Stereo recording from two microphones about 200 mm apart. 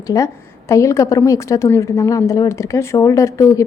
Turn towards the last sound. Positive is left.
turn(degrees=15)  # may be behind; listen again after turning